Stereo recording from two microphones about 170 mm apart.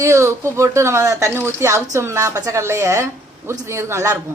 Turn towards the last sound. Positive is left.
turn(degrees=-15)  # may be behind; listen again after turning